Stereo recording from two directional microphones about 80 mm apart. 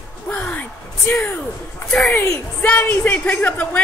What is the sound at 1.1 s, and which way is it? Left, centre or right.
A woman's voice, left.